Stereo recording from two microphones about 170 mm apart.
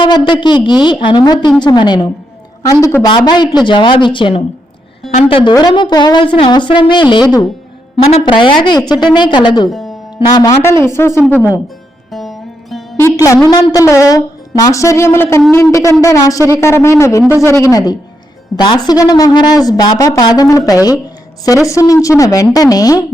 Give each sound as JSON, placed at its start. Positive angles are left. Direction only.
{"t": 0.0, "sound": "speech", "side_deg": 30}
{"t": 9.6, "sound": "speech", "side_deg": 0}
{"t": 10.3, "sound": "a woman's voice", "side_deg": 20}
{"t": 12.1, "sound": "music", "side_deg": 0}
{"t": 13.0, "sound": "a woman's voice", "side_deg": 15}